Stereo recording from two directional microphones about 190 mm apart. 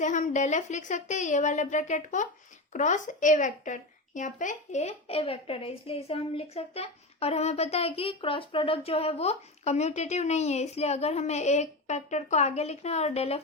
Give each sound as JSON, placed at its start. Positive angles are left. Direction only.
{"t": 0.0, "sound": "a woman's voice", "side_deg": 40}